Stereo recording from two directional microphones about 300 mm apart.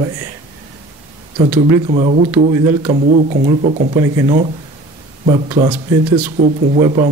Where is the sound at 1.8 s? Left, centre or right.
Right.